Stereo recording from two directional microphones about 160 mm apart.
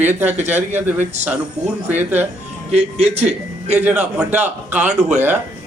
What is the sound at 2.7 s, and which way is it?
Speech, 40° right (ahead or behind).